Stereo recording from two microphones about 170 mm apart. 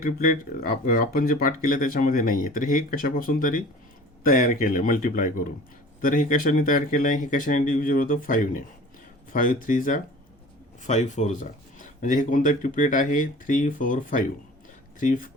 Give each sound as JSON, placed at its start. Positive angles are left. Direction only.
{"t": 0.0, "sound": "speech", "side_deg": 55}